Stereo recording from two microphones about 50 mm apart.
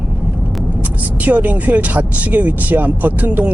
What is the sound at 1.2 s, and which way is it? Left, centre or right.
Speech, right.